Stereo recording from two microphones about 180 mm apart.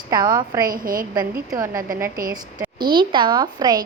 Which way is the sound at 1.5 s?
20° right (ahead or behind).